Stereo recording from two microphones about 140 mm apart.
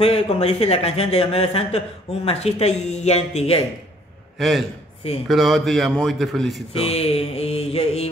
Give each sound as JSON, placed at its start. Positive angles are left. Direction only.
{"t": 0.0, "sound": "speech", "side_deg": 45}
{"t": 4.4, "sound": "a man's voice", "side_deg": 0}
{"t": 6.7, "sound": "speech", "side_deg": 45}